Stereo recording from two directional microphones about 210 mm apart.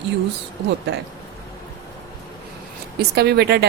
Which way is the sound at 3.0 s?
50° right (ahead or behind).